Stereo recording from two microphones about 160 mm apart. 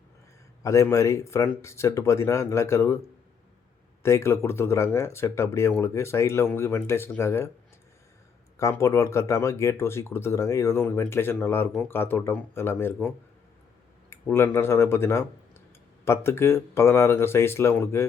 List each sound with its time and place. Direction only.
0.6 s speech: 20° left (ahead or behind)
4.0 s speech: 15° left (ahead or behind)
8.5 s speech: 20° left (ahead or behind)
14.1 s speech: 15° left (ahead or behind)